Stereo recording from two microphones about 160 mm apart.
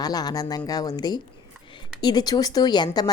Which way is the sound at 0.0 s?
25° left (ahead or behind).